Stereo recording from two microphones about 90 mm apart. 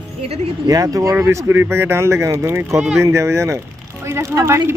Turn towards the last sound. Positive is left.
turn(degrees=-30)  # may be behind; listen again after turning